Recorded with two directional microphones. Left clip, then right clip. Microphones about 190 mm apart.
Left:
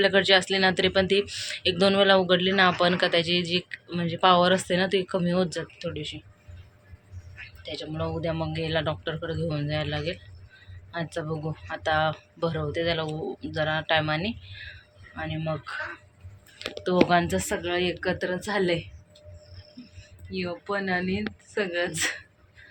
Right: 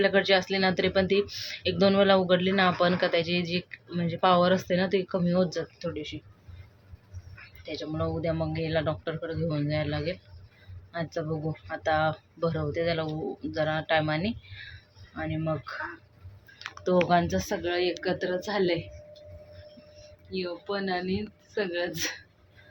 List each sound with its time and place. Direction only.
0.0 s speech: 5° left (ahead or behind)
7.6 s speech: centre (ahead or behind)
16.8 s speech: 5° left (ahead or behind)
17.2 s a woman's voice: 15° left (ahead or behind)
20.3 s a woman's voice: 20° left (ahead or behind)